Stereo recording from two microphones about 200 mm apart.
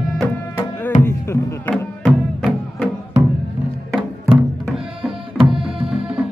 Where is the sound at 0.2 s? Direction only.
10° left (ahead or behind).